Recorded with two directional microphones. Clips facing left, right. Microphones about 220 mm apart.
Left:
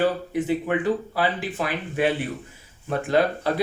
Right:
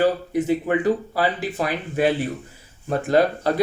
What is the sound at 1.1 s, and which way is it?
Speech, 40° right (ahead or behind).